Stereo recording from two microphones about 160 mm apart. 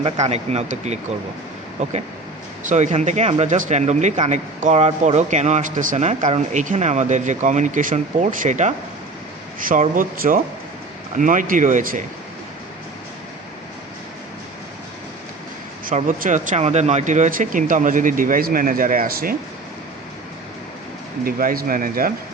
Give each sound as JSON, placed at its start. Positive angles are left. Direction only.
{"t": 0.0, "sound": "speech", "side_deg": -40}
{"t": 9.6, "sound": "speech", "side_deg": -60}
{"t": 16.0, "sound": "speech", "side_deg": -50}
{"t": 21.2, "sound": "speech", "side_deg": -65}